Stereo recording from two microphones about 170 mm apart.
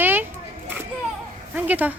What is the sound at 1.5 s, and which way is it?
Speech, 10° right (ahead or behind).